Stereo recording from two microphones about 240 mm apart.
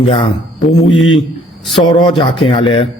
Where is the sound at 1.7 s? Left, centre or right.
Centre.